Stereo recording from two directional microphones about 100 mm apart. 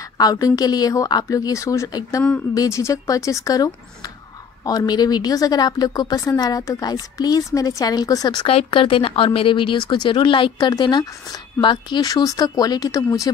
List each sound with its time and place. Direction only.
0.2 s a woman's voice: 40° left (ahead or behind)
8.5 s a woman's voice: 65° left (ahead or behind); by 13.3 s 35° left (ahead or behind)